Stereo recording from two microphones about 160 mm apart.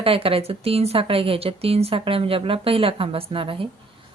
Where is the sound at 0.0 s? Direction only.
35° right (ahead or behind).